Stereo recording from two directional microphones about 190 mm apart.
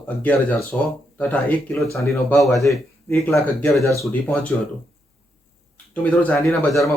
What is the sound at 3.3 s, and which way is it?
Speech, 15° left (ahead or behind).